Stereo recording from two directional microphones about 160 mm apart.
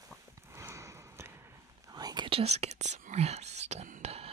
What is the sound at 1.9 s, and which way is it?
Whispering, 25° right (ahead or behind).